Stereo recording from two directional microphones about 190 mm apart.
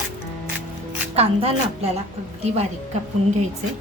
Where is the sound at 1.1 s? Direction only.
35° right (ahead or behind).